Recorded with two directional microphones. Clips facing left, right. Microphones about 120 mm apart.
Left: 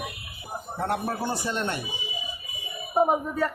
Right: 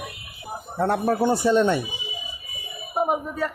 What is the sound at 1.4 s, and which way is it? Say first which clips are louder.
Speech: right 11 dB; 90° right.